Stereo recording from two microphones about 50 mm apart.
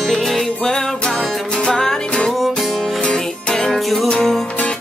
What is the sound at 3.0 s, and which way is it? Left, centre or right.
Music, centre.